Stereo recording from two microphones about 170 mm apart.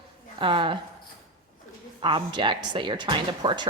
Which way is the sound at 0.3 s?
30° right (ahead or behind).